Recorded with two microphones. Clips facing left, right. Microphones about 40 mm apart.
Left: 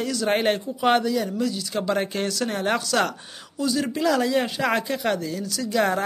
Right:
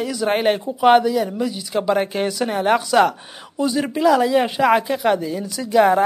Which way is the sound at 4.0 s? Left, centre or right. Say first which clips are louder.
Right 7 dB; centre.